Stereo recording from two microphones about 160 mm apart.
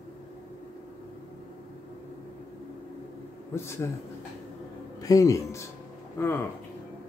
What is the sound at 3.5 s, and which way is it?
Speech, 15° left (ahead or behind).